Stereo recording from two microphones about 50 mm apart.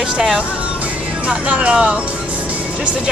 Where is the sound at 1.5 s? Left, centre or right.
Right.